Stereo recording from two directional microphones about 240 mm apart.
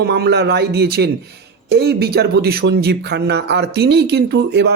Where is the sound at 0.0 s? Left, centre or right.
Right.